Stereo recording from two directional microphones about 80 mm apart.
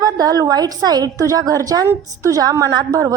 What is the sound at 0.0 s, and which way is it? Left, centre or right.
A woman's voice, right.